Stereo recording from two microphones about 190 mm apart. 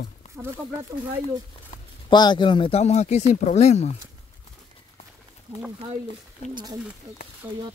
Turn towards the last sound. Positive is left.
turn(degrees=-10)  # may be behind; listen again after turning